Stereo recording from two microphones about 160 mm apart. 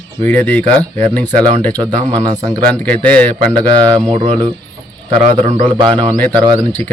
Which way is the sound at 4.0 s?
30° right (ahead or behind).